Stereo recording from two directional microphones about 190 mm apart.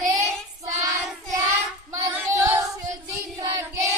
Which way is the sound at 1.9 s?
15° right (ahead or behind).